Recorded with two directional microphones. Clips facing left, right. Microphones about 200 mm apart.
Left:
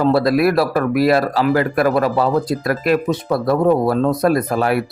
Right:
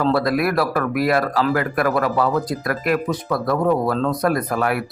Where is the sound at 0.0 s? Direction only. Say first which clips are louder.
Left 4 dB; 25° left (ahead or behind).